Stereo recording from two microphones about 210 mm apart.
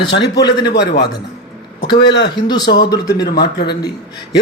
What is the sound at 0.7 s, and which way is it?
Speech, 50° left (ahead or behind).